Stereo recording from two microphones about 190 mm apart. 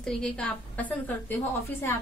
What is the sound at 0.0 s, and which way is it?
A woman's voice, 5° left (ahead or behind).